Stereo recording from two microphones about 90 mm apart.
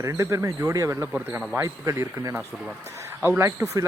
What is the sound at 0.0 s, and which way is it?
Speech, 35° right (ahead or behind).